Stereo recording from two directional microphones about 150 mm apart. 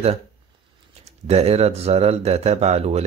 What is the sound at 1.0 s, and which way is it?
A man's voice, 45° right (ahead or behind).